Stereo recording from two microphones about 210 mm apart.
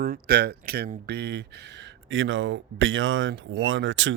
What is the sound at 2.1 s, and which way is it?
Speech, 65° right (ahead or behind).